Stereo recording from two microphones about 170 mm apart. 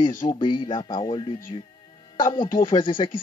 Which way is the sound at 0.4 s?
30° left (ahead or behind).